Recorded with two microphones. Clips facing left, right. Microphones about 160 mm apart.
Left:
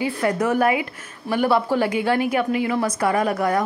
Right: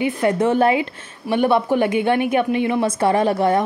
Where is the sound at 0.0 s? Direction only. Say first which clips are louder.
Right 3 dB; 25° right (ahead or behind).